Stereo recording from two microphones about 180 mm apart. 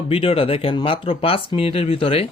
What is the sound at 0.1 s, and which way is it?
Speech, 30° left (ahead or behind).